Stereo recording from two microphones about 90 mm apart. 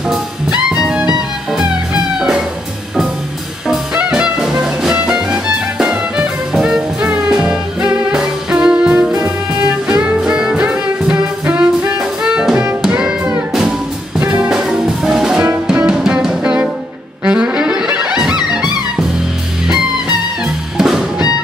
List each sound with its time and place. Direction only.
0.1 s music: 10° right (ahead or behind)
2.1 s music: 5° right (ahead or behind)
3.6 s music: 5° right (ahead or behind)
17.2 s saxophone: 15° right (ahead or behind)
20.7 s music: 5° right (ahead or behind)